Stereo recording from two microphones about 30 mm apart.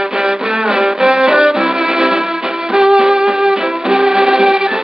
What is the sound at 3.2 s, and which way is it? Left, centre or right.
Music, centre.